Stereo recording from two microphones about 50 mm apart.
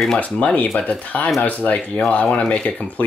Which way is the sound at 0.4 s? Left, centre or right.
Left.